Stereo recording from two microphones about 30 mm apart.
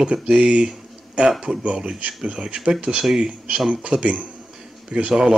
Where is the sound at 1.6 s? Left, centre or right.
Right.